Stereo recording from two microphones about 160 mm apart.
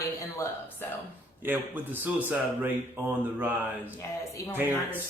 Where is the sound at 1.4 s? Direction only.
10° right (ahead or behind).